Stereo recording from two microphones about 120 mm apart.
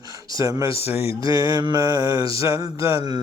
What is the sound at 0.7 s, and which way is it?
Speech, 55° left (ahead or behind).